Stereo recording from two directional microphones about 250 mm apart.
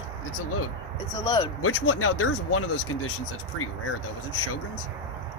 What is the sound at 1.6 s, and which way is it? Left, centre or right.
Speech, left.